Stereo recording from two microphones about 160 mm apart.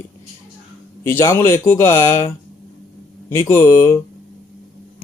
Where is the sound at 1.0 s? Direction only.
15° left (ahead or behind).